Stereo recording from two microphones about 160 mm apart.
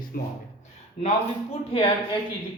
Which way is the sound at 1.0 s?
40° left (ahead or behind).